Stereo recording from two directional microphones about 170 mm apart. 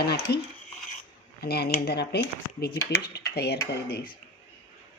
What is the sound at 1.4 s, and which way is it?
Speech, 70° left (ahead or behind).